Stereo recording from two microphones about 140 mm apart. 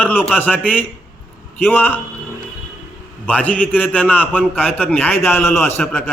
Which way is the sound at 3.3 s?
10° left (ahead or behind).